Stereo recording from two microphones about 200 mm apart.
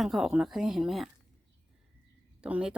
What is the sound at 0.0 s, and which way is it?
Speech, centre (ahead or behind).